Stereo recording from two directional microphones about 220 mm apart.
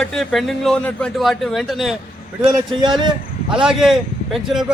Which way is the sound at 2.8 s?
20° right (ahead or behind).